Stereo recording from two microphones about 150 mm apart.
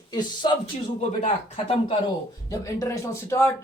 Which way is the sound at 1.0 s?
45° left (ahead or behind).